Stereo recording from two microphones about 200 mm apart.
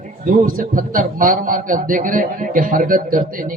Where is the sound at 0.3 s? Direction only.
45° right (ahead or behind).